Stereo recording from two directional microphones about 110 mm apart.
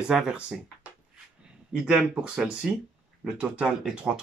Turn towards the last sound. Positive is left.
turn(degrees=-10)  # may be behind; listen again after turning